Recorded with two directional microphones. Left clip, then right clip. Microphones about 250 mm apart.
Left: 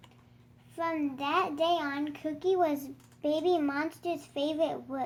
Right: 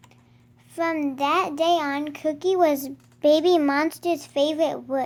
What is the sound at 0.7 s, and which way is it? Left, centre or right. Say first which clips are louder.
A child's voice: right 7 dB; right.